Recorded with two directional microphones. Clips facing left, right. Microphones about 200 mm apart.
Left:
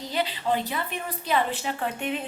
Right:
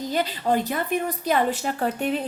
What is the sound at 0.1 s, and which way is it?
A woman's voice, 45° right (ahead or behind).